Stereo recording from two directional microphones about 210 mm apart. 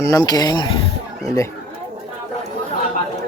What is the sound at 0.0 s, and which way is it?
Speech, 15° left (ahead or behind).